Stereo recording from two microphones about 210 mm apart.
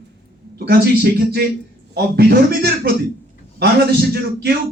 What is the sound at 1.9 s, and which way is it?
A man's voice, 50° right (ahead or behind).